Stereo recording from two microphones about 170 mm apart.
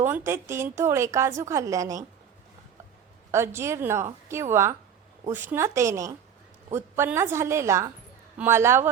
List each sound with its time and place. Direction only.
0.0 s a woman's voice: 15° right (ahead or behind)
3.3 s a woman's voice: 15° right (ahead or behind)